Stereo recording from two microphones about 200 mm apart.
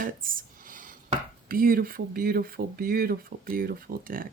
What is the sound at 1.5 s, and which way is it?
Speech, 45° right (ahead or behind).